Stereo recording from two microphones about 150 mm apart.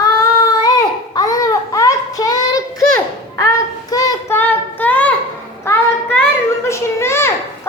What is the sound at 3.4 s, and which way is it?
Child singing, 25° left (ahead or behind).